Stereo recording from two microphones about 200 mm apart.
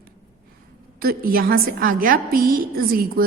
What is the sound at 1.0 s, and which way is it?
A woman's voice, 45° right (ahead or behind).